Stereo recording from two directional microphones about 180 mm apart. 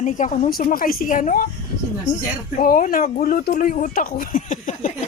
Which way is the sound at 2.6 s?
50° left (ahead or behind).